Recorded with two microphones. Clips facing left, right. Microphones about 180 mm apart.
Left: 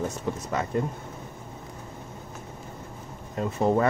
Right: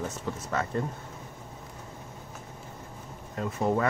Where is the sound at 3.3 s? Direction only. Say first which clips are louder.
Left 4 dB; 25° left (ahead or behind).